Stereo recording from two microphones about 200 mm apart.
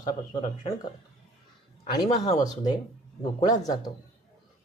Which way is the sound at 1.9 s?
20° left (ahead or behind).